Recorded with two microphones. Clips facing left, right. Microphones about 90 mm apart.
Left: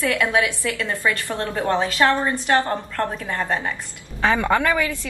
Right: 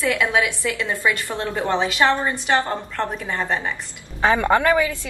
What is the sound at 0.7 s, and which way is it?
Speech, 15° right (ahead or behind).